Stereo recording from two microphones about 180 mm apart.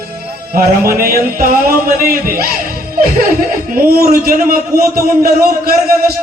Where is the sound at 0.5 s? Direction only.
55° right (ahead or behind).